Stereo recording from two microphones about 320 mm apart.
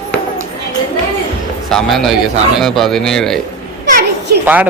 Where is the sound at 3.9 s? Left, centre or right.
Right.